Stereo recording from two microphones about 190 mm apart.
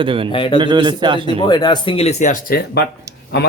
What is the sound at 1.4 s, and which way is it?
Speech, 20° left (ahead or behind).